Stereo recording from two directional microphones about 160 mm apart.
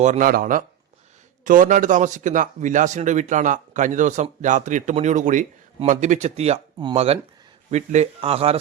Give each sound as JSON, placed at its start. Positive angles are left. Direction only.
{"t": 0.0, "sound": "a man's voice", "side_deg": -50}
{"t": 0.3, "sound": "a man's voice", "side_deg": -65}